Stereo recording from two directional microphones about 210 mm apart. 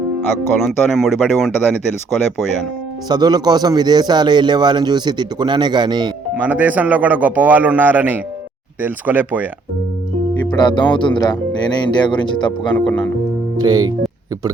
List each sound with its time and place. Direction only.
0.6 s speech: centre (ahead or behind)
3.1 s a man's voice: 20° right (ahead or behind)
6.3 s a man's voice: 5° right (ahead or behind)
10.5 s speech: 20° left (ahead or behind)
12.7 s speech: 5° left (ahead or behind)
13.6 s a man's voice: 15° right (ahead or behind)